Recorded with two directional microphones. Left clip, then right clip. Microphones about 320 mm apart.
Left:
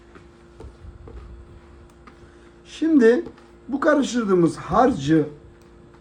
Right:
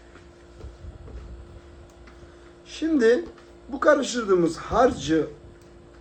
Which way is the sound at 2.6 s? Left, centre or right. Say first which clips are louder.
Left 4 dB; left.